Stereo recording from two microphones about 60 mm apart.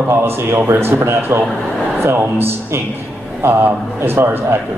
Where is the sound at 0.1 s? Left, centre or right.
Right.